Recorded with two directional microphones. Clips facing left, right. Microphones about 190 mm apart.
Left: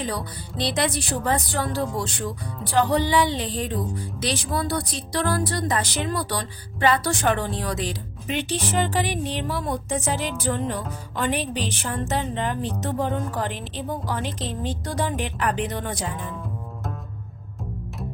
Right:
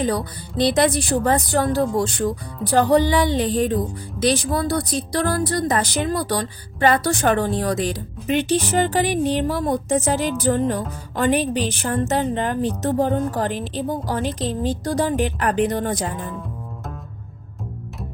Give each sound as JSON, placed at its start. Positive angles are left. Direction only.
{"t": 0.0, "sound": "speech", "side_deg": -45}